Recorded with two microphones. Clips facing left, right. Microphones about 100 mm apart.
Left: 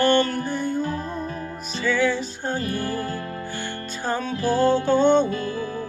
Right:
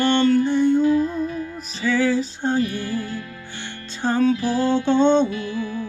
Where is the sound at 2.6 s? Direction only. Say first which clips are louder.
Right 2 dB; 40° left (ahead or behind).